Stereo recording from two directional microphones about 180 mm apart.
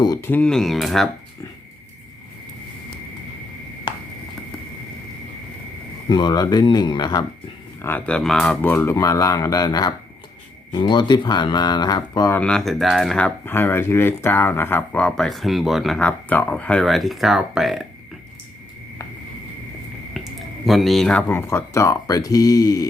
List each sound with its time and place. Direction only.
0.0 s speech: 20° left (ahead or behind); by 1.1 s centre (ahead or behind)
6.1 s speech: 25° left (ahead or behind)
7.8 s speech: 10° left (ahead or behind)
20.1 s speech: centre (ahead or behind); by 22.9 s 20° left (ahead or behind)